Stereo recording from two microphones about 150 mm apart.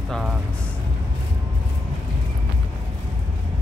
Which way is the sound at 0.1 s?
5° right (ahead or behind).